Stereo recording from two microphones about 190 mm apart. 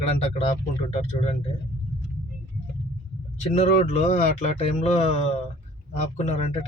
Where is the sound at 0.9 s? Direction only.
35° left (ahead or behind).